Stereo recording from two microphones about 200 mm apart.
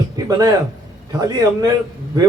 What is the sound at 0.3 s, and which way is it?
A man's voice, 20° right (ahead or behind).